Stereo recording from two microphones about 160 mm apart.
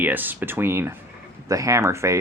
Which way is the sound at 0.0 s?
10° right (ahead or behind).